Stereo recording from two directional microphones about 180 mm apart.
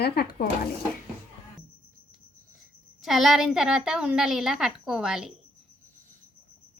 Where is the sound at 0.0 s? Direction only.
60° left (ahead or behind).